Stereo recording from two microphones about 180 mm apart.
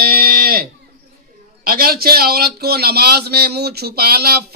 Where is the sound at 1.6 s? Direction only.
55° right (ahead or behind).